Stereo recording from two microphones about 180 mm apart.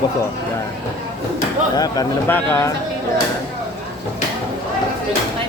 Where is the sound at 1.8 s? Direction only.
20° left (ahead or behind).